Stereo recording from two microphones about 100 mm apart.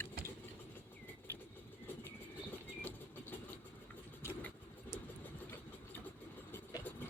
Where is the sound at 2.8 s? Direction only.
20° left (ahead or behind).